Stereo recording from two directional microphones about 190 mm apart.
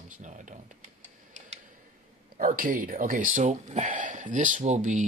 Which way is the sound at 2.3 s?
50° right (ahead or behind).